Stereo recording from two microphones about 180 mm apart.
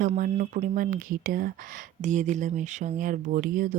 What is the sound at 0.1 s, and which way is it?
Speech, 45° right (ahead or behind).